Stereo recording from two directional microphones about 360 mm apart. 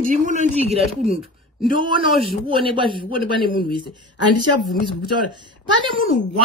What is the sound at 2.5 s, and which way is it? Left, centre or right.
Speech, centre.